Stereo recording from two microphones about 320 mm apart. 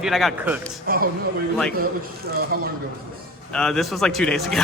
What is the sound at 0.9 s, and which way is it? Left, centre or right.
Speech, right.